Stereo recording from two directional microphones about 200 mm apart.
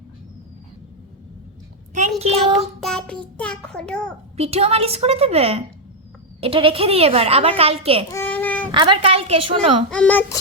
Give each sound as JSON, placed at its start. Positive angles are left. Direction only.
{"t": 2.0, "sound": "child singing", "side_deg": -30}
{"t": 2.8, "sound": "child singing", "side_deg": 5}
{"t": 3.3, "sound": "a child's voice", "side_deg": 5}
{"t": 4.4, "sound": "a woman's voice", "side_deg": -30}
{"t": 8.1, "sound": "child singing", "side_deg": 10}
{"t": 8.7, "sound": "a woman's voice", "side_deg": -25}
{"t": 9.9, "sound": "a woman's voice", "side_deg": 5}